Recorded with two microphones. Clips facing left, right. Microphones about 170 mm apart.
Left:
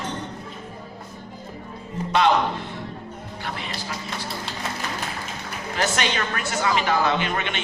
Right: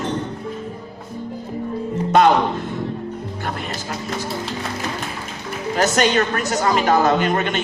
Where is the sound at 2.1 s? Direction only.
45° right (ahead or behind).